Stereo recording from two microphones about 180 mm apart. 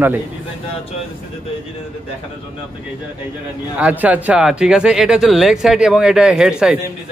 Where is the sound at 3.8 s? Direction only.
10° right (ahead or behind).